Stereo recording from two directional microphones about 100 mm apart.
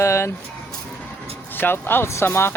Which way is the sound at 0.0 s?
30° left (ahead or behind).